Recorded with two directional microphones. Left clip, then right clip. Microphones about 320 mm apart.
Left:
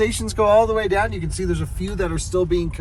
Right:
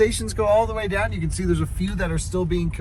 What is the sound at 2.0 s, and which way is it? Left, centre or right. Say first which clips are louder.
Speech: left 5 dB; left.